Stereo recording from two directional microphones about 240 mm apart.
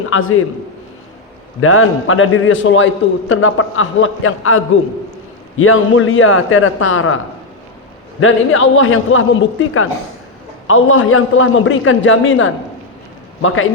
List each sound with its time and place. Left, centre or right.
0.1 s a man's voice: left
1.6 s a man's voice: left
8.2 s a man's voice: left